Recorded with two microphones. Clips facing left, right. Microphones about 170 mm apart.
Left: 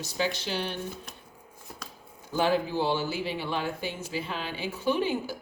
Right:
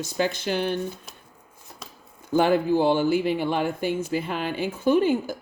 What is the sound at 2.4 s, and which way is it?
Speech, 55° right (ahead or behind).